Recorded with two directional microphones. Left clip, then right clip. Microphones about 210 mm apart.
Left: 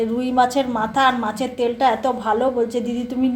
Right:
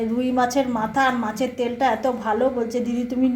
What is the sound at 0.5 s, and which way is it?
A woman's voice, centre (ahead or behind).